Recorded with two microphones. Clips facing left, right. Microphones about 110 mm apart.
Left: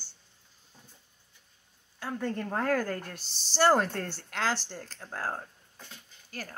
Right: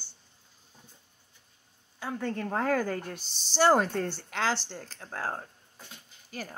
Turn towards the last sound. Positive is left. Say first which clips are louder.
# right 2 dB
turn(degrees=-5)  # may be behind; listen again after turning